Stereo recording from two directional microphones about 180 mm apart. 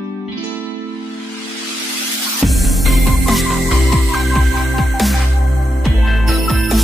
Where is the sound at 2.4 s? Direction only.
Centre (ahead or behind).